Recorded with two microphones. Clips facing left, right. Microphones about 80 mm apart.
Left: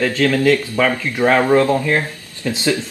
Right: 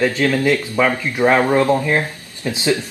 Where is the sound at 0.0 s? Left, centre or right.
Right.